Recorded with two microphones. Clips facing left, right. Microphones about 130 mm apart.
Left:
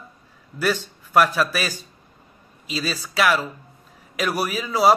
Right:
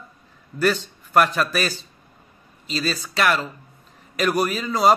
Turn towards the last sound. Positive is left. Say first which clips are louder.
# even
turn(degrees=5)  # may be behind; listen again after turning